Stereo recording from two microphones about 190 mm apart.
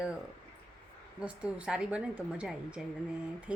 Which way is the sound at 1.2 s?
5° right (ahead or behind).